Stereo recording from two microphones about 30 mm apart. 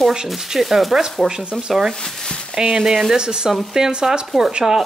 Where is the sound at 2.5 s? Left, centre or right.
Right.